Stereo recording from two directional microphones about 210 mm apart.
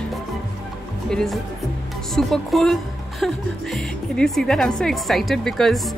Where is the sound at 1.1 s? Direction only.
Centre (ahead or behind).